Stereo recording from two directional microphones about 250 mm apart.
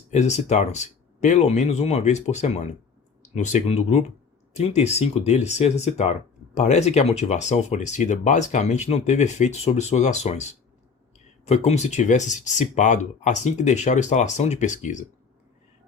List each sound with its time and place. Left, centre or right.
0.1 s speech: left
11.4 s speech: left